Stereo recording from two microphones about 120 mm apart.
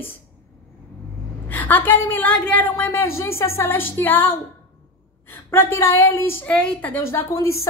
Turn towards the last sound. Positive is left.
turn(degrees=25)  # may be behind; listen again after turning